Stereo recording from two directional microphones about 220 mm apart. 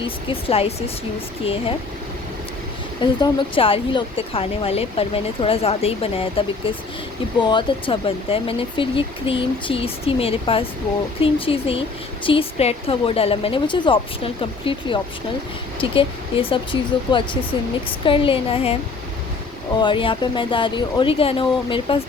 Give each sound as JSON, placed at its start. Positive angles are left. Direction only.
{"t": 0.0, "sound": "a woman's voice", "side_deg": 25}
{"t": 3.0, "sound": "a woman's voice", "side_deg": 20}
{"t": 19.8, "sound": "a woman's voice", "side_deg": 25}